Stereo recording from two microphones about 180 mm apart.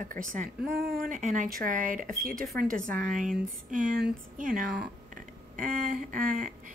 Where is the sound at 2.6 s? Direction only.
50° right (ahead or behind).